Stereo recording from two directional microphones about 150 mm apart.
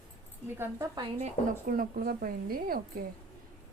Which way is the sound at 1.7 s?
70° right (ahead or behind).